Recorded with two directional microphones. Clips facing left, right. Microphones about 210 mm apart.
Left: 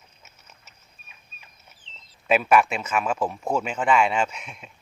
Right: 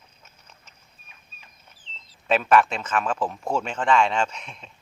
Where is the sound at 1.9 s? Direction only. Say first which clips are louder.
Right 4 dB; 35° right (ahead or behind).